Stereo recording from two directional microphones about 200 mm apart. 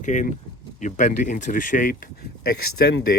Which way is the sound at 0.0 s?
40° left (ahead or behind).